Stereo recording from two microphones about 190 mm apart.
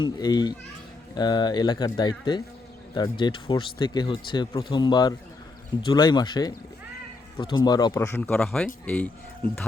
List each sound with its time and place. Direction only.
0.0 s speech: 20° left (ahead or behind); by 9.0 s 5° left (ahead or behind)